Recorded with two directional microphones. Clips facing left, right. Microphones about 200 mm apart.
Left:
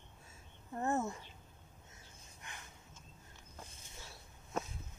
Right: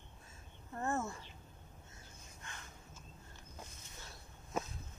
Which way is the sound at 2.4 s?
15° left (ahead or behind).